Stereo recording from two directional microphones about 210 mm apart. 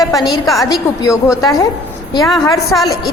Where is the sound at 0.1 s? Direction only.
20° left (ahead or behind).